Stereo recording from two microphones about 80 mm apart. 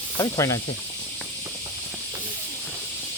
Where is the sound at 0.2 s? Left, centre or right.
Left.